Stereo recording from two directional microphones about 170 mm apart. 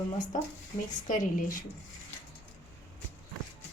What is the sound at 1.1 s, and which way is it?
Speech, 50° left (ahead or behind).